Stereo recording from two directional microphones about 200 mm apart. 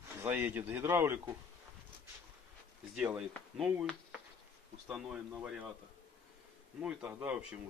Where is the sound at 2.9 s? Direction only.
5° right (ahead or behind).